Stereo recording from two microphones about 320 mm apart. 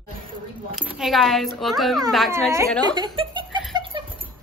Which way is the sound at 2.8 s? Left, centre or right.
Centre.